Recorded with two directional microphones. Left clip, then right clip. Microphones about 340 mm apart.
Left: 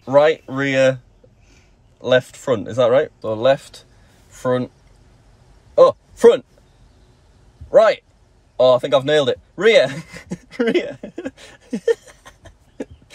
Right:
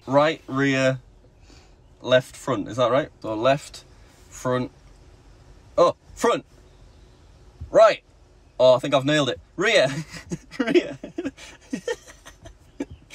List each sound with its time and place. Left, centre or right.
0.0 s speech: centre
2.0 s speech: centre
4.3 s a sound: centre
5.8 s speech: centre
7.7 s speech: centre